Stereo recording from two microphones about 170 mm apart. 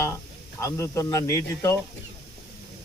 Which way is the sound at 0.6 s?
15° left (ahead or behind).